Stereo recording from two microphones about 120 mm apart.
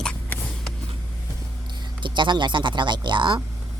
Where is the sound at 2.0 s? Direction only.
40° right (ahead or behind).